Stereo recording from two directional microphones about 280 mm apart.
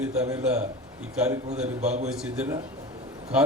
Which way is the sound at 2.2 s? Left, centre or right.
Centre.